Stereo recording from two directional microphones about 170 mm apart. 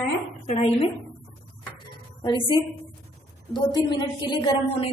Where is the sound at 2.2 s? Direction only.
30° left (ahead or behind).